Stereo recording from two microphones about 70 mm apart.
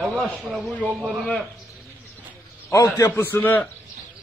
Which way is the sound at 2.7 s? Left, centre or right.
Left.